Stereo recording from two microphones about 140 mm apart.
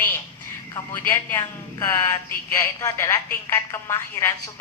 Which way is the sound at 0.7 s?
20° left (ahead or behind).